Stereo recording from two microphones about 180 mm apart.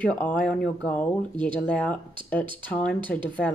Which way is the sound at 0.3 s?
5° left (ahead or behind).